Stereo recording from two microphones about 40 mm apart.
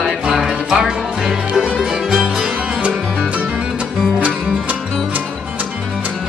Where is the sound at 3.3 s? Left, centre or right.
Right.